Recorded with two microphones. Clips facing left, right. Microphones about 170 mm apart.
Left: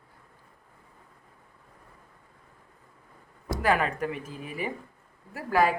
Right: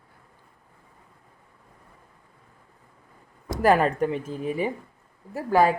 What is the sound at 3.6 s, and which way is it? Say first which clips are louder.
A woman's voice: right 6 dB; 40° right (ahead or behind).